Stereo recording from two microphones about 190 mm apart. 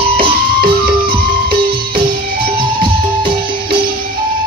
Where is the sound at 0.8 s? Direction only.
50° right (ahead or behind).